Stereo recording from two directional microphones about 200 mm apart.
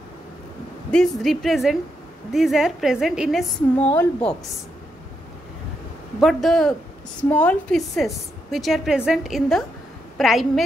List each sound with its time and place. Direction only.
0.9 s a woman's voice: centre (ahead or behind)
3.9 s a woman's voice: 10° left (ahead or behind)
6.1 s a woman's voice: centre (ahead or behind)